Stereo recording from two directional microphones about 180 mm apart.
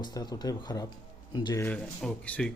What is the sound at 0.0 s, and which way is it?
Speech, 25° left (ahead or behind).